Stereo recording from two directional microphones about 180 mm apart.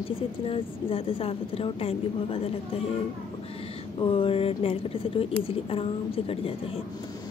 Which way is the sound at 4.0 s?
30° left (ahead or behind).